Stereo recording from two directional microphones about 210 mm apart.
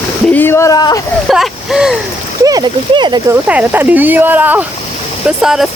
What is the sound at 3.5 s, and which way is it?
Speech, 5° right (ahead or behind).